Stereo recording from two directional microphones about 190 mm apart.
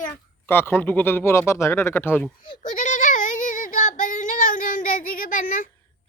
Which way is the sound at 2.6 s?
40° left (ahead or behind).